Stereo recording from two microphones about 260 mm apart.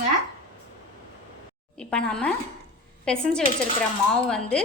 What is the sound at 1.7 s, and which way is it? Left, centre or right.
A woman's voice, centre.